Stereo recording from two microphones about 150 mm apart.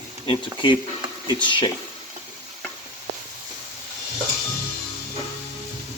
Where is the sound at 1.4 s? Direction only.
30° left (ahead or behind).